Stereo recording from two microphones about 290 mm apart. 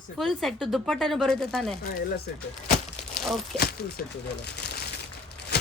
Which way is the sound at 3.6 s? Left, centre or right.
Left.